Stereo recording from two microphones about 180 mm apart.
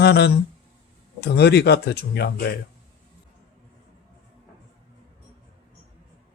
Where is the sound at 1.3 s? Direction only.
65° left (ahead or behind).